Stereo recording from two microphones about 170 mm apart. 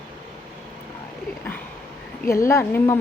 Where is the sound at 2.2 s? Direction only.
15° left (ahead or behind).